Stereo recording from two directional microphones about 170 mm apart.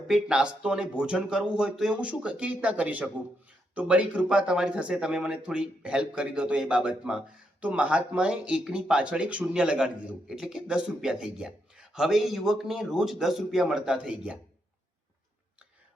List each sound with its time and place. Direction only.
0.1 s speech: 5° right (ahead or behind)